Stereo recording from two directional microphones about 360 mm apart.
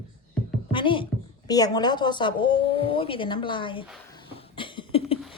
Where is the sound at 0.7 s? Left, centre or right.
Centre.